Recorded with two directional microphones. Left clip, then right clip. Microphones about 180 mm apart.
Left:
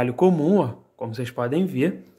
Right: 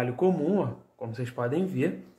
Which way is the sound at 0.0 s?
45° left (ahead or behind).